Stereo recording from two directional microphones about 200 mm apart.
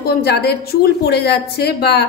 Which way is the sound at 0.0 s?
50° left (ahead or behind).